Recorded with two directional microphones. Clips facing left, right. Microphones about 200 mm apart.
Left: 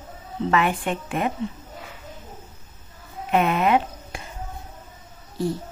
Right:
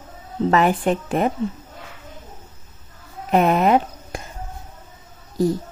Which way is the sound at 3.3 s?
40° right (ahead or behind).